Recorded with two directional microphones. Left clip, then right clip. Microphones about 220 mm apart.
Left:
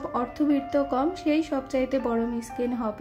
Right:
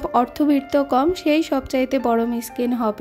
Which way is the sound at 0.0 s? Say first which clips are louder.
Right 8 dB; 40° right (ahead or behind).